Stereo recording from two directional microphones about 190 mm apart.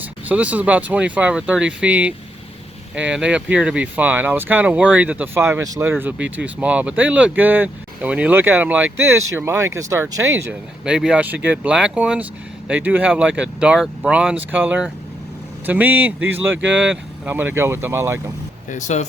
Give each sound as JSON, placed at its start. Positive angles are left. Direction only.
{"t": 0.0, "sound": "speech", "side_deg": -10}
{"t": 10.8, "sound": "speech", "side_deg": -5}
{"t": 18.7, "sound": "speech", "side_deg": 40}